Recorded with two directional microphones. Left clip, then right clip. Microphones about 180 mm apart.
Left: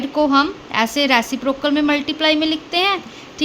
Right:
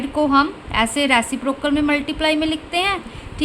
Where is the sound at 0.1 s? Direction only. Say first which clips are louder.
Left 1 dB; 10° left (ahead or behind).